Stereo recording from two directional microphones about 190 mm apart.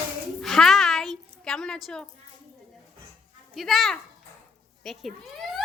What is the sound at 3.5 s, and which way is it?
Speech, centre (ahead or behind).